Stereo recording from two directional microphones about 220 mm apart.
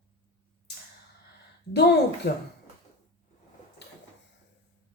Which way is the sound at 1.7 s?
50° left (ahead or behind).